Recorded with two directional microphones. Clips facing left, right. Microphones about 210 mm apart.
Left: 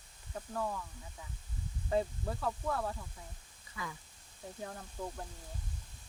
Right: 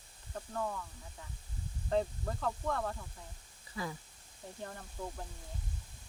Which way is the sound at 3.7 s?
35° right (ahead or behind).